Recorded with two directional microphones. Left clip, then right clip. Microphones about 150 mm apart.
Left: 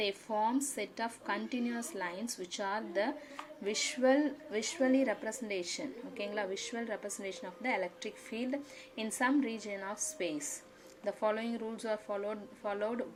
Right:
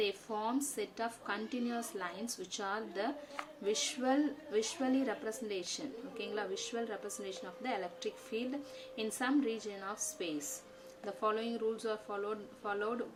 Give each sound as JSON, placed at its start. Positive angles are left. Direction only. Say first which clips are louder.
{"t": 0.0, "sound": "a woman's voice", "louder": "left 3 dB", "side_deg": 20}